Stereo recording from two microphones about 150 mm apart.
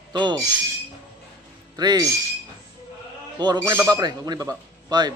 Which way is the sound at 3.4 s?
25° right (ahead or behind).